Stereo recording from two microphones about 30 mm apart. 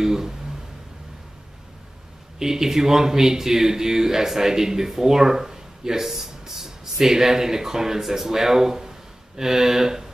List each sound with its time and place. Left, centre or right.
0.0 s speech: centre
2.3 s speech: centre